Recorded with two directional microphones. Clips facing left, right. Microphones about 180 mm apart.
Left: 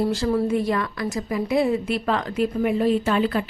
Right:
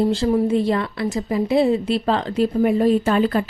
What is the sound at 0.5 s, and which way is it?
Speech, 25° right (ahead or behind).